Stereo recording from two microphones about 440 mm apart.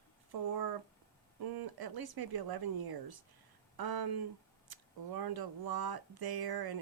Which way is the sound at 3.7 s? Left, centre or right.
Right.